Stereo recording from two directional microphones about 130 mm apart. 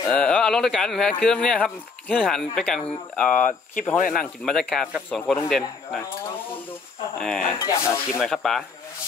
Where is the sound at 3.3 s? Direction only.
80° left.